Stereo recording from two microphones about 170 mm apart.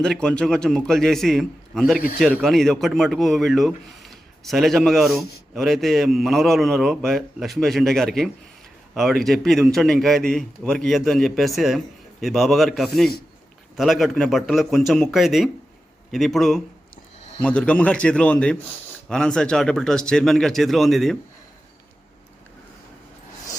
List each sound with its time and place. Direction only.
0.0 s speech: 5° left (ahead or behind)
16.9 s a sound: 40° left (ahead or behind)
17.4 s a man's voice: 5° left (ahead or behind)